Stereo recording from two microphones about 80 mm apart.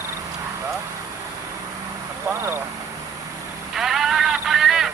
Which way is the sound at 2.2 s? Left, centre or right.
Right.